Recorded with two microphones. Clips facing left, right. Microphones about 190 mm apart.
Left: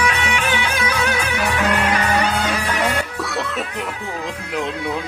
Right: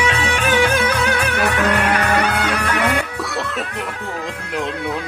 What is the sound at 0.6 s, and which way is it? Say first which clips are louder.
Music: right 4 dB; 55° right (ahead or behind).